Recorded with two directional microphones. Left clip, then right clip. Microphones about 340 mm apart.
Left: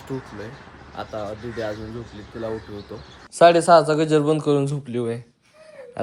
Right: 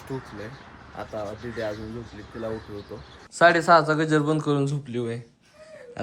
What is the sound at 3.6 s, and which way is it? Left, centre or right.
Speech, centre.